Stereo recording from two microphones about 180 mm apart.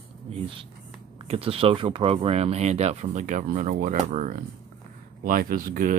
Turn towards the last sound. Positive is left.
turn(degrees=-50)  # may be behind; listen again after turning